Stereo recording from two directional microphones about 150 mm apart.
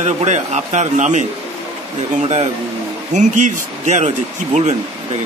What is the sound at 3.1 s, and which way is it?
Speech, 55° right (ahead or behind).